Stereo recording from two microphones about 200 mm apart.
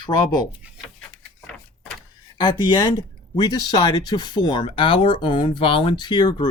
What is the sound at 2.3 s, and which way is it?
Speech, 20° left (ahead or behind).